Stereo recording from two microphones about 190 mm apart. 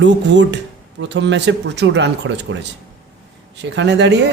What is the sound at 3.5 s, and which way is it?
Speech, 65° right (ahead or behind).